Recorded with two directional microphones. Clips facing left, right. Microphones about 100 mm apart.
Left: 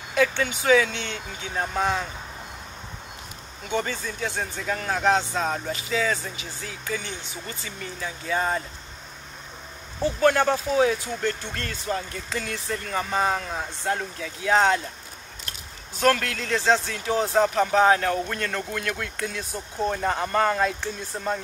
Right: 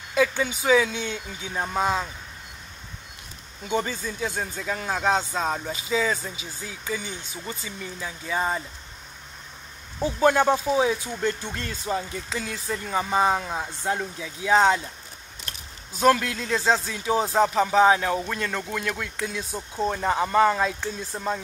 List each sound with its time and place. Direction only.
0.1 s speech: 15° right (ahead or behind)
3.7 s speech: 10° right (ahead or behind)
5.7 s speech: 20° right (ahead or behind)
10.0 s speech: 15° right (ahead or behind)
16.0 s speech: 15° right (ahead or behind)
16.9 s speech: 15° right (ahead or behind)
17.4 s speech: 5° right (ahead or behind)